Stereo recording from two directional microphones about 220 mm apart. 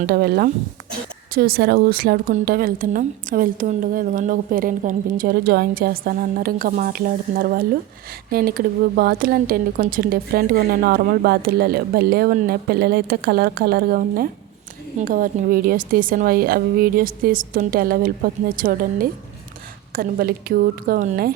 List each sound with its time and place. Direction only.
0.0 s a woman's voice: 45° right (ahead or behind)